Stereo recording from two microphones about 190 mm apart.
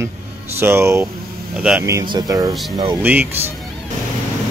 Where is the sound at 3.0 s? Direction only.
10° right (ahead or behind).